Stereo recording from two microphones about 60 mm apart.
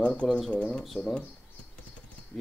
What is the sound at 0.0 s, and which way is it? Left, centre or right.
Speech, centre.